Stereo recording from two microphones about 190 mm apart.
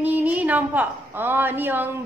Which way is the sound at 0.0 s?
10° right (ahead or behind).